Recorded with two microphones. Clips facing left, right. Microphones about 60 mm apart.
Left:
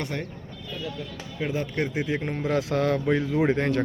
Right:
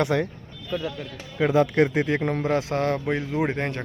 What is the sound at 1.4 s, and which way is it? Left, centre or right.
Speech, right.